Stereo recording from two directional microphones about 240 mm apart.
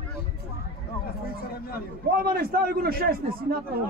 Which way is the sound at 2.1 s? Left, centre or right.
Right.